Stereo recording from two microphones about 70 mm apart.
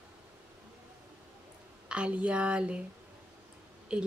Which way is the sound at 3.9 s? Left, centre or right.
Centre.